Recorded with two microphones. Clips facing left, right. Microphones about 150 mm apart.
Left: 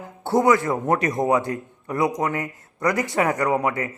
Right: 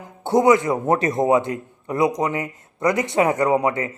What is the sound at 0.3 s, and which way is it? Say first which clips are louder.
A man's voice: right 3 dB; 20° right (ahead or behind).